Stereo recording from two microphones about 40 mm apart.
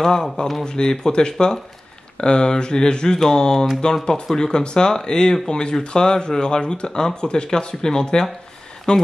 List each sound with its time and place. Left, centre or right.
0.0 s speech: centre